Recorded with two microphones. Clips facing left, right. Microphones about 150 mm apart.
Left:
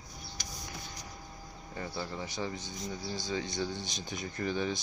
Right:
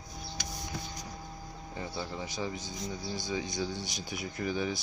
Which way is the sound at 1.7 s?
15° right (ahead or behind).